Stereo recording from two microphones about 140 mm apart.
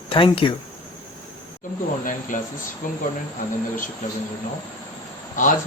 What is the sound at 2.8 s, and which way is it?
Speech, 80° left.